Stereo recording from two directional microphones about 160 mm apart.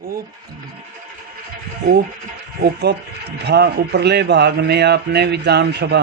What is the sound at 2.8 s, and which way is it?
Speech, 90° right.